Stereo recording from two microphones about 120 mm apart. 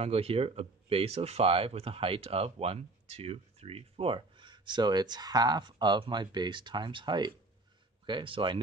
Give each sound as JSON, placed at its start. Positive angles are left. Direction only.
{"t": 0.0, "sound": "speech", "side_deg": -55}